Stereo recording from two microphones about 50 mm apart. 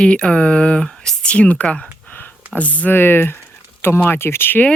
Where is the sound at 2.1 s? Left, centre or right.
Left.